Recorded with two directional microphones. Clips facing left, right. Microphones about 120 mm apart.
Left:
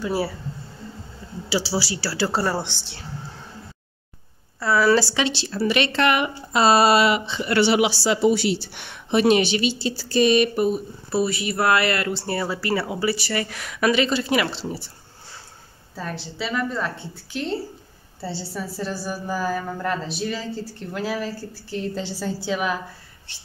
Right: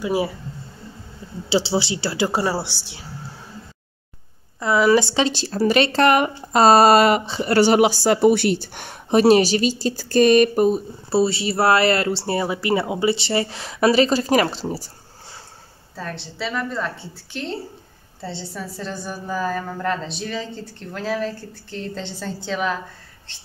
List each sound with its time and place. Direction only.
0.0 s speech: 15° right (ahead or behind)
1.5 s speech: 25° right (ahead or behind)
4.6 s speech: 20° right (ahead or behind)
5.1 s speech: 40° right (ahead or behind)
16.0 s a woman's voice: centre (ahead or behind)